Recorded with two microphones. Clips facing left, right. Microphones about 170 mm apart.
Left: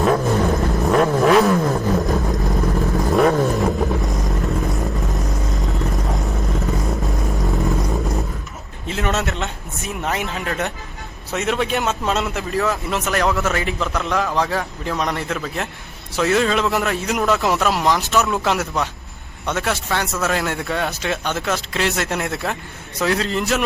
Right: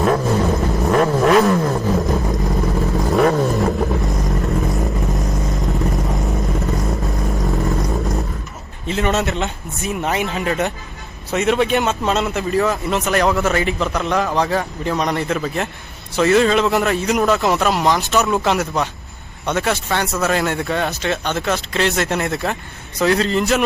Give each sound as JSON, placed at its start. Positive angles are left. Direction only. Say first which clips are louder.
{"t": 0.0, "sound": "vehicle", "louder": "even", "side_deg": 0}
{"t": 8.9, "sound": "a man's voice", "louder": "right 3 dB", "side_deg": 0}